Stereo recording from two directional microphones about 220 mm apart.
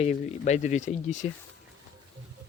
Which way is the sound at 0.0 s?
30° left (ahead or behind).